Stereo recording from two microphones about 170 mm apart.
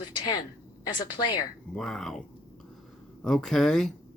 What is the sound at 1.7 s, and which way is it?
Speech, 5° left (ahead or behind).